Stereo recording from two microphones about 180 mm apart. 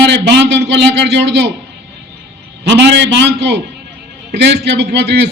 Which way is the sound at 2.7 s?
75° right (ahead or behind).